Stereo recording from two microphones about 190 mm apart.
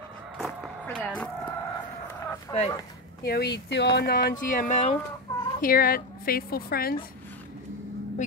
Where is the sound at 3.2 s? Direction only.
55° left (ahead or behind); by 5.0 s 35° left (ahead or behind).